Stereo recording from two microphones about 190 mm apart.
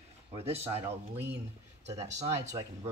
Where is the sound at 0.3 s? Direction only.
30° right (ahead or behind).